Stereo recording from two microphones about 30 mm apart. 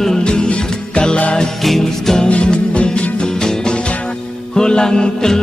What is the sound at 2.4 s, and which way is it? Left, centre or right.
Music, left.